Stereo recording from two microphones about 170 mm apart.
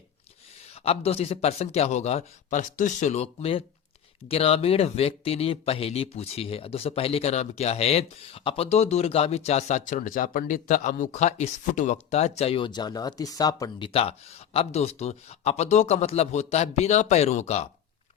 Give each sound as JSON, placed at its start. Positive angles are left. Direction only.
{"t": 0.9, "sound": "speech", "side_deg": 35}